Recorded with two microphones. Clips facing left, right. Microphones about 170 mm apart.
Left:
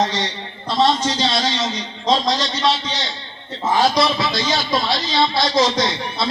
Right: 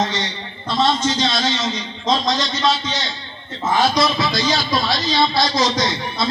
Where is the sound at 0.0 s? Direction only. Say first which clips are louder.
Left 2 dB; 35° left (ahead or behind).